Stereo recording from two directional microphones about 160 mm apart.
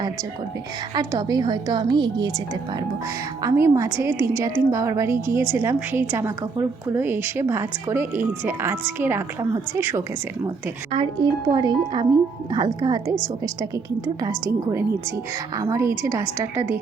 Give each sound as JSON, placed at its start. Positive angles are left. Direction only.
{"t": 0.9, "sound": "speech", "side_deg": -25}
{"t": 3.4, "sound": "a woman's voice", "side_deg": -20}
{"t": 10.9, "sound": "speech", "side_deg": -30}